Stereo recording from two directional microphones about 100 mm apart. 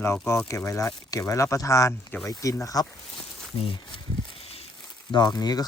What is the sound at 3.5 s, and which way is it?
Speech, 65° left (ahead or behind).